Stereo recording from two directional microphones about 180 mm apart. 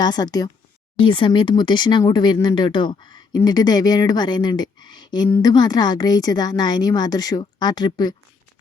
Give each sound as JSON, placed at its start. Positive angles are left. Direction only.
{"t": 0.0, "sound": "speech", "side_deg": 20}